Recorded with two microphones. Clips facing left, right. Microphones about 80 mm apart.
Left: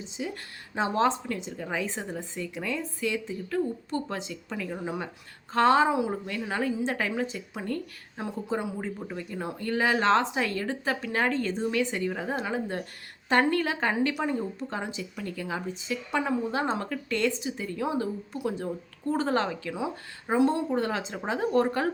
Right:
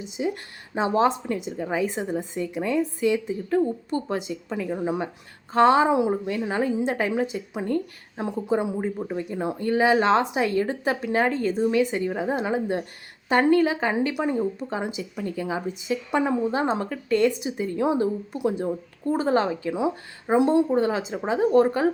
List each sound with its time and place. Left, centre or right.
0.2 s speech: right
0.7 s speech: centre